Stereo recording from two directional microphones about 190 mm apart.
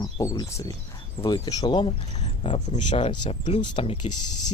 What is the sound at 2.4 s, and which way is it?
Speech, 35° left (ahead or behind).